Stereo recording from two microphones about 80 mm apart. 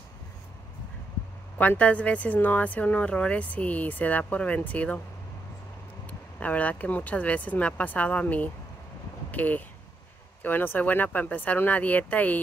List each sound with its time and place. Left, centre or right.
1.6 s speech: centre
6.0 s speech: centre